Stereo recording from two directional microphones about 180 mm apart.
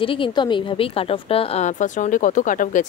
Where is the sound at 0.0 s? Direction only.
30° left (ahead or behind).